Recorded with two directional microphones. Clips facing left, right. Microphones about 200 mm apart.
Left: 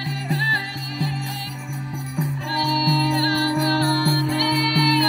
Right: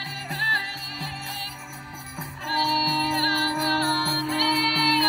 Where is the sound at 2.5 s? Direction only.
15° left (ahead or behind).